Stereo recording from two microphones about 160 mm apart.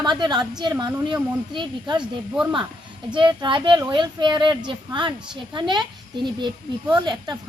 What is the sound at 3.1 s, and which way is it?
A woman's voice, 30° right (ahead or behind).